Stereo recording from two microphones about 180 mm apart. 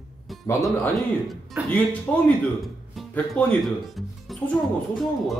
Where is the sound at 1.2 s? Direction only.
Centre (ahead or behind).